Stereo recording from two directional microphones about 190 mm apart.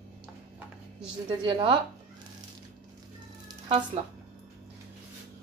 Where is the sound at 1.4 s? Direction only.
25° right (ahead or behind).